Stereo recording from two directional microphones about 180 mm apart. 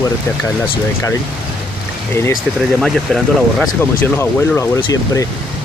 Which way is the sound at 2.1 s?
15° left (ahead or behind).